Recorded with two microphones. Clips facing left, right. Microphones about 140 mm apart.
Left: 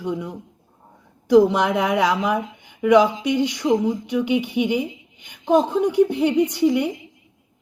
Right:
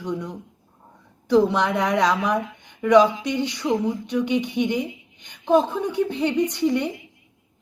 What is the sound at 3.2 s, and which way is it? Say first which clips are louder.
Speech: left 4 dB; 10° left (ahead or behind).